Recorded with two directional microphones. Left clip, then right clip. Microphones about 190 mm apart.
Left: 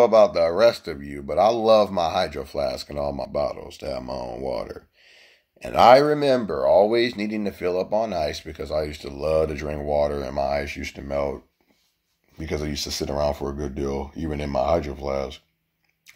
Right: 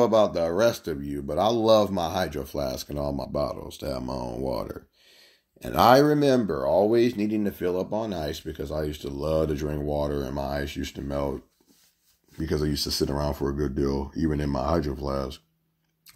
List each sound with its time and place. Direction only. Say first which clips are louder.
0.0 s speech: left 5 dB; 35° right (ahead or behind)
8.6 s speech: left 5 dB; 35° right (ahead or behind)
12.4 s speech: right 1 dB; 35° right (ahead or behind)